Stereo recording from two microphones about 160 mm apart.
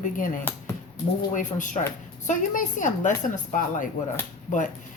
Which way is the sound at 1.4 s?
50° left (ahead or behind).